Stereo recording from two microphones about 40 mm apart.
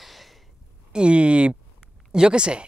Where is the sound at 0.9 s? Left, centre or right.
Right.